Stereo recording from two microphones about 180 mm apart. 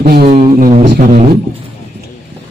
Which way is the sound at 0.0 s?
60° right (ahead or behind).